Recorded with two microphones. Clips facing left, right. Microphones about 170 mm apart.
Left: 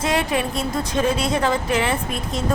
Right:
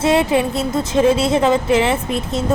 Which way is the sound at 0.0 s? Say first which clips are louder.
Right 6 dB; 25° right (ahead or behind).